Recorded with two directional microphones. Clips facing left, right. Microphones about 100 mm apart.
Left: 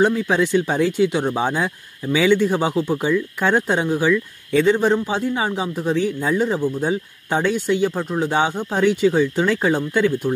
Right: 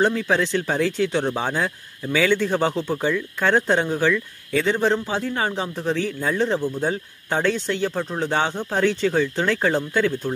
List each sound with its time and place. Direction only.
0.0 s a man's voice: 15° left (ahead or behind)